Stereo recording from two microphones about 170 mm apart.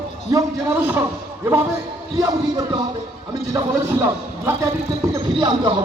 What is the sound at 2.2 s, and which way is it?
Speech, 25° right (ahead or behind).